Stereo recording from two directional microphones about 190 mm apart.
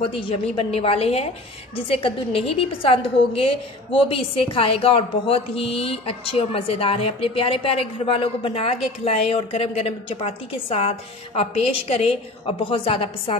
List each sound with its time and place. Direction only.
0.1 s a woman's voice: 30° left (ahead or behind)